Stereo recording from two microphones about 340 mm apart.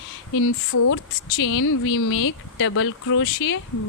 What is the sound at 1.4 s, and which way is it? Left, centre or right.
Speech, left.